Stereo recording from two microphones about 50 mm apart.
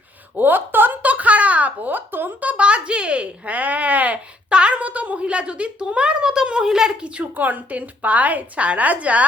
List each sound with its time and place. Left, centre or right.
0.3 s a sound: right
2.4 s a child's voice: right; by 6.9 s centre
7.0 s a woman's voice: right